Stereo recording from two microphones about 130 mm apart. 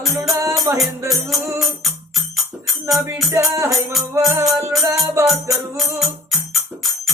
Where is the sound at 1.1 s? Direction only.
Centre (ahead or behind).